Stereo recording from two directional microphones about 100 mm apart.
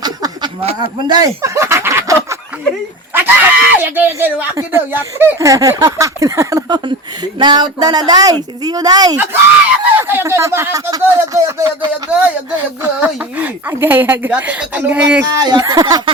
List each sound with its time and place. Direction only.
0.0 s a sound: 45° right (ahead or behind); by 2.4 s 25° right (ahead or behind)
3.1 s speech: 20° right (ahead or behind)
5.4 s speech: 35° right (ahead or behind)
6.7 s speech: 45° right (ahead or behind)
9.1 s speech: 25° right (ahead or behind)
12.2 s speech: 15° right (ahead or behind)
15.4 s speech: 45° right (ahead or behind)